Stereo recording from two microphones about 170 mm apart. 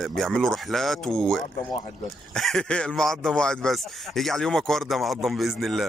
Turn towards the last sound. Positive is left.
turn(degrees=0)  # may be behind; listen again after turning